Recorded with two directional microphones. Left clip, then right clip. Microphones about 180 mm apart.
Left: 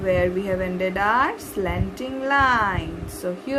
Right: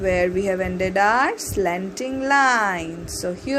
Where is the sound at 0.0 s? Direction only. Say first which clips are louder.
Right 1 dB; 25° right (ahead or behind).